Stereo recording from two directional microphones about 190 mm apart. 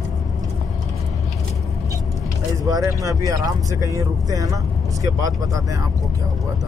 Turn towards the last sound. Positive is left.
turn(degrees=-15)  # may be behind; listen again after turning